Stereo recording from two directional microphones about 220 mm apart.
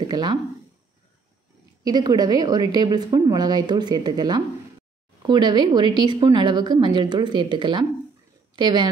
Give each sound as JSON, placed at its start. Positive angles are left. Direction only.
{"t": 0.0, "sound": "speech", "side_deg": -20}
{"t": 1.9, "sound": "a woman's voice", "side_deg": -20}